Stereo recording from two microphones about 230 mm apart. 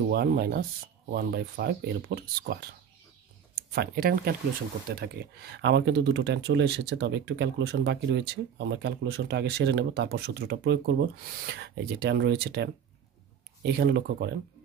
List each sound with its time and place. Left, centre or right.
0.1 s speech: right
3.7 s speech: right